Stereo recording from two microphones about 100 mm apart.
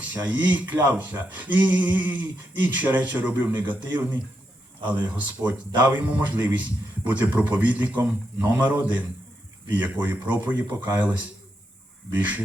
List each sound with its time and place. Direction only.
0.0 s speech: 15° right (ahead or behind)
12.1 s speech: 15° right (ahead or behind)